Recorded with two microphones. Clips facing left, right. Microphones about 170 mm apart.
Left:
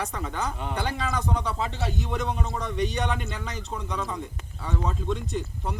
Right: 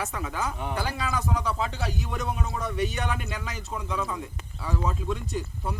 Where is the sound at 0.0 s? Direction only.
5° right (ahead or behind).